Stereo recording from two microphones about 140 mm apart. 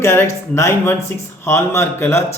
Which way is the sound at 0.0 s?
20° left (ahead or behind).